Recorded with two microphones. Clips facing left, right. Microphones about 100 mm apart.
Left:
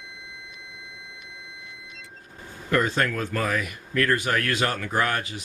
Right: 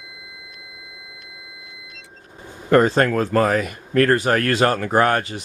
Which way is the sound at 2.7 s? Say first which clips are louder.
Right 8 dB; 40° right (ahead or behind).